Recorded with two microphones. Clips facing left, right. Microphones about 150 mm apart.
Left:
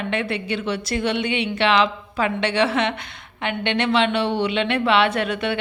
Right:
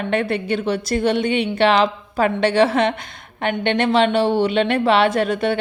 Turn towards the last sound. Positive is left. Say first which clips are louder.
# right 4 dB
turn(degrees=-40)  # may be behind; listen again after turning